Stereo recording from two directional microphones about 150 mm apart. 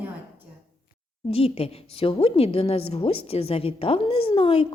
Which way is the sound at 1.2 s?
40° left (ahead or behind).